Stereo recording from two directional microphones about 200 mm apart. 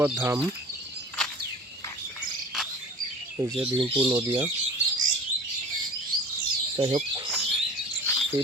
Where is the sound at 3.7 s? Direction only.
25° right (ahead or behind).